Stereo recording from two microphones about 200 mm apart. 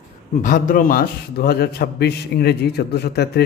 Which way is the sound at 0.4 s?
40° left (ahead or behind).